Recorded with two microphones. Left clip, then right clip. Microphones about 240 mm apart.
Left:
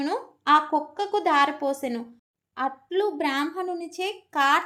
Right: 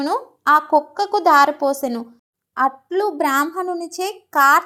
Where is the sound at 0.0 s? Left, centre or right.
Right.